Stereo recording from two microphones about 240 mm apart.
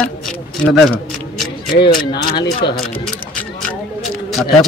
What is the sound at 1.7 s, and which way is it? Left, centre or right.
Speech, left.